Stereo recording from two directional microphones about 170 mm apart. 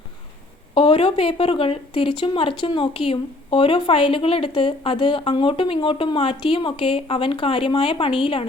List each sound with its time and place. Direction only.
0.7 s speech: 30° left (ahead or behind)